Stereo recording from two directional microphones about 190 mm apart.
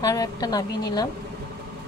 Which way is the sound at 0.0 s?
20° left (ahead or behind).